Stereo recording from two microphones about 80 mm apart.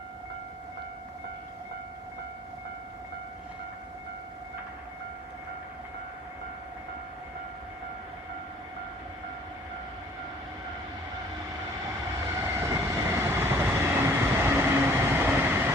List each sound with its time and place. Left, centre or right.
12.4 s train: right